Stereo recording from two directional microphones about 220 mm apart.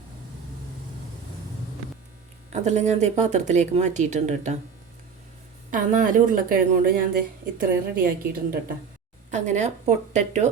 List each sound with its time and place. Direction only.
2.5 s speech: 30° right (ahead or behind)
5.7 s speech: 35° right (ahead or behind)